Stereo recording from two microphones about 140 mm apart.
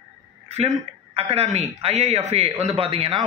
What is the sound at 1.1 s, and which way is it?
A man's voice, 45° right (ahead or behind).